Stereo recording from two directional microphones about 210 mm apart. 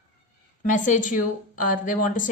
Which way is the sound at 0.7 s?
35° left (ahead or behind).